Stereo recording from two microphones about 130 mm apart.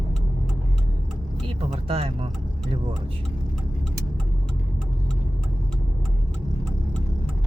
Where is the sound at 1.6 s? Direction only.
45° right (ahead or behind).